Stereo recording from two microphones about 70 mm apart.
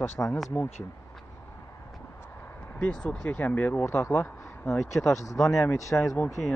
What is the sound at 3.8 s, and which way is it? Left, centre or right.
Speech, left.